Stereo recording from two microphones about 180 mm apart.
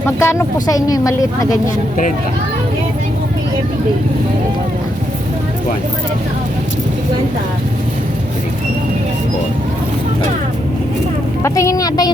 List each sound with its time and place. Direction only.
0.2 s a woman's voice: 15° left (ahead or behind)
11.4 s a woman's voice: 15° left (ahead or behind)